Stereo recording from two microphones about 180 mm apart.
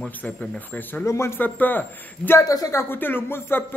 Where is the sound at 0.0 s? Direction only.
10° left (ahead or behind).